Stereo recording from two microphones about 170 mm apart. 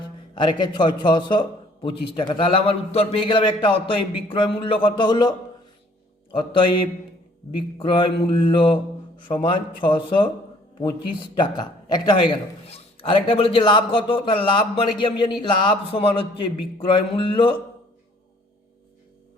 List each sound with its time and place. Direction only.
0.3 s a man's voice: 25° left (ahead or behind)
6.3 s a man's voice: 30° left (ahead or behind)